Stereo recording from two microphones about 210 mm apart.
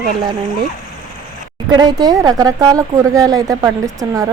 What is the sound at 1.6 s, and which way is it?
Speech, 20° right (ahead or behind).